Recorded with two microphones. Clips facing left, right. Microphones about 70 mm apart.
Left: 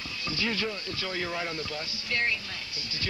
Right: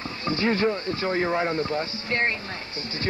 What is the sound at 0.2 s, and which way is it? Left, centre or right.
Speech, right.